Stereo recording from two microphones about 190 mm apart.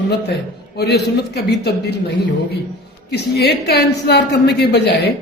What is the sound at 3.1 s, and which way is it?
A woman's voice, 60° left (ahead or behind).